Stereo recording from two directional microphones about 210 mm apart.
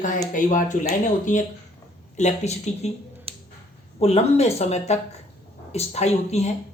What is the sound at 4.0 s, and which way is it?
A man's voice, 30° left (ahead or behind).